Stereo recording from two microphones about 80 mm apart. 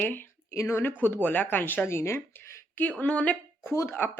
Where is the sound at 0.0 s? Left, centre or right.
Left.